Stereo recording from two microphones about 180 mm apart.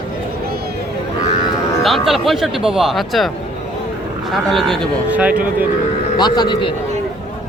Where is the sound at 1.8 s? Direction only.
Centre (ahead or behind).